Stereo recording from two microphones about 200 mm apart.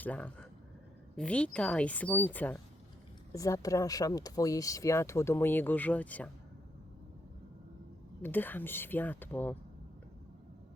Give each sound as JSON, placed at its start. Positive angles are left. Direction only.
{"t": 0.0, "sound": "speech", "side_deg": 5}
{"t": 8.2, "sound": "speech", "side_deg": 10}